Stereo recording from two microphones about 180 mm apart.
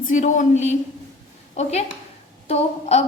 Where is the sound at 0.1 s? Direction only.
45° left (ahead or behind).